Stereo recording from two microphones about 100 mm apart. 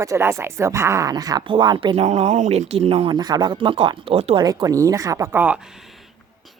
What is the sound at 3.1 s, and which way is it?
Speech, 45° right (ahead or behind).